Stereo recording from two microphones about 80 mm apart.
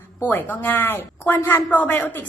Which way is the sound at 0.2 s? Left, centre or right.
Left.